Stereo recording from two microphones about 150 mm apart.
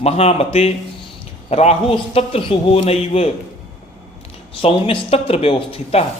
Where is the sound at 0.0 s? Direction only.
45° left (ahead or behind).